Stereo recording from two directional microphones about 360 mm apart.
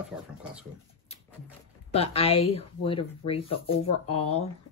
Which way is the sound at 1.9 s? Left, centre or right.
Centre.